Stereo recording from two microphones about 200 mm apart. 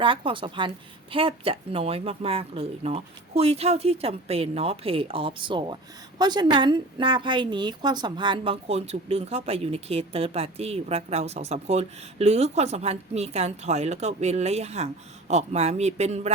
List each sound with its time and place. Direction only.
0.0 s speech: 25° right (ahead or behind)